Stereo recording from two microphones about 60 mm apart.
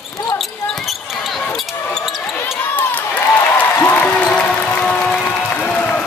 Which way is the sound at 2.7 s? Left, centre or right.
Left.